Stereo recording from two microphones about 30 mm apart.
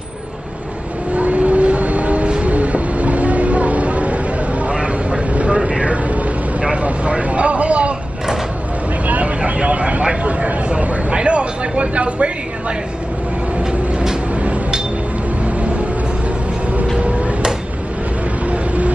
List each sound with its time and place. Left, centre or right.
1.1 s vehicle: right
5.3 s vehicle: right
5.6 s vehicle: right
6.8 s vehicle: right
9.0 s vehicle: right
9.4 s vehicle: right
16.9 s tick-tock: right